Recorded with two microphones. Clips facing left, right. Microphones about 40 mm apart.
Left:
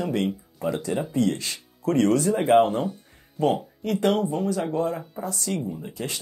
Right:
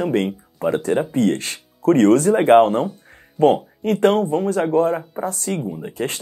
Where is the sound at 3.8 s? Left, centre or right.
Right.